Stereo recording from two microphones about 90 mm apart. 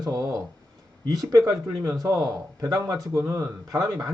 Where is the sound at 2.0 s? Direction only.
40° right (ahead or behind).